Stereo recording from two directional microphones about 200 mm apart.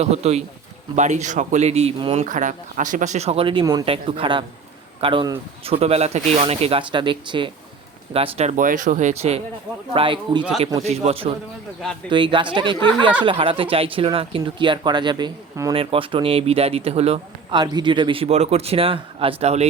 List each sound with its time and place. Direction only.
0.0 s speech: 30° right (ahead or behind)
2.2 s a man's voice: 40° right (ahead or behind)